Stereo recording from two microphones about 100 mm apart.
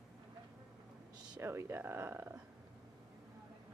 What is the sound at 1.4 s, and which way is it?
Speech, 25° right (ahead or behind).